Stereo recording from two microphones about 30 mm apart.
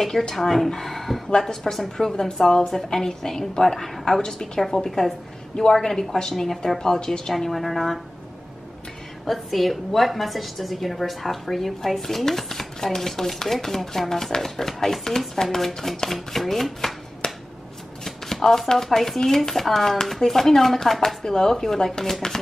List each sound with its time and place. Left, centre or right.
0.3 s speech: centre
4.2 s speech: centre
9.2 s a woman's voice: centre
17.2 s finger snapping: centre
18.0 s shuffling cards: centre
18.8 s speech: centre